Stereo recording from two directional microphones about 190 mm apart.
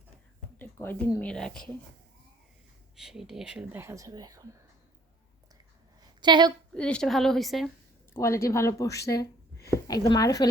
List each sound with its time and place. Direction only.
0.6 s speech: 10° left (ahead or behind)
2.9 s speech: centre (ahead or behind); by 4.4 s 20° right (ahead or behind)
6.2 s a woman's voice: 25° right (ahead or behind)
6.7 s a woman's voice: 5° left (ahead or behind)
8.1 s speech: 15° left (ahead or behind)